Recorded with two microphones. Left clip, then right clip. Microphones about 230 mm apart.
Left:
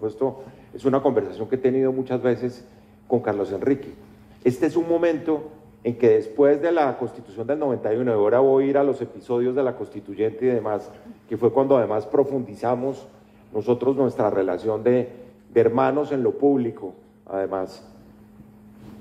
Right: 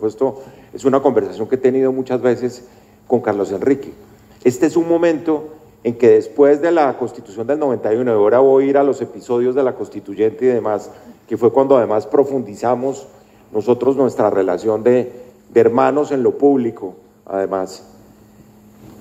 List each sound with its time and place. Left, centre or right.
0.0 s a man's voice: right